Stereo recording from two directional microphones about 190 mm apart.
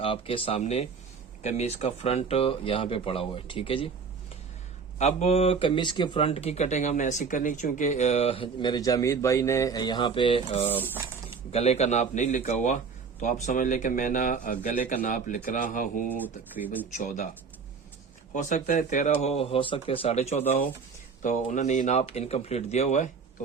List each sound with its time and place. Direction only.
0.0 s speech: 30° left (ahead or behind)
4.9 s a man's voice: 35° left (ahead or behind)
18.4 s a man's voice: 45° left (ahead or behind)